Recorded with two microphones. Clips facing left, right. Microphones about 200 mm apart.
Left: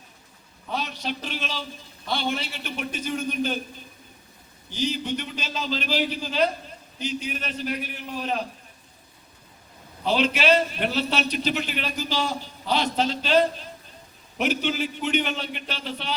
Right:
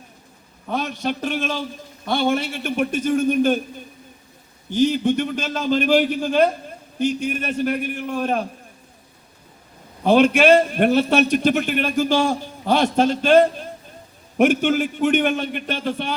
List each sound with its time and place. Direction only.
0.7 s a man's voice: 50° right (ahead or behind)
10.0 s a man's voice: 50° right (ahead or behind)